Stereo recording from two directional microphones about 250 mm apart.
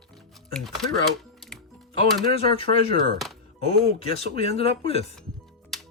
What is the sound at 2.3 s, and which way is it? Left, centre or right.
Speech, left.